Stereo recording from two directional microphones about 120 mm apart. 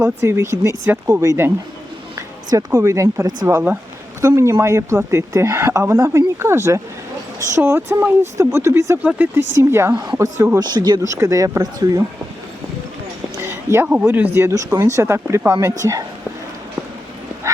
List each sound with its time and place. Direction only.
0.0 s speech: 25° right (ahead or behind)
2.7 s speech: 25° right (ahead or behind)
10.8 s speech: 35° right (ahead or behind)
11.0 s speech: 25° right (ahead or behind)
13.3 s a sound: 20° right (ahead or behind)
13.8 s speech: 15° right (ahead or behind)